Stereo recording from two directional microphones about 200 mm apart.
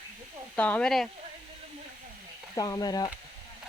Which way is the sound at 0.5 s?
5° left (ahead or behind).